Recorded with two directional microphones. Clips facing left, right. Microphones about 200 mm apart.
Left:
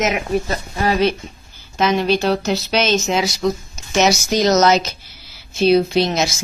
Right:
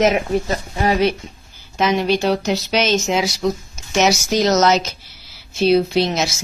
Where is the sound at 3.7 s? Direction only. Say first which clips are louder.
Even; 10° right (ahead or behind).